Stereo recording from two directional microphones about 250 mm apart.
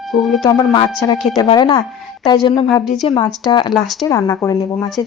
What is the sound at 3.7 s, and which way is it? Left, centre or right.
Speech, centre.